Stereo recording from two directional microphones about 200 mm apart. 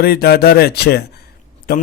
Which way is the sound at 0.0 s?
50° left (ahead or behind).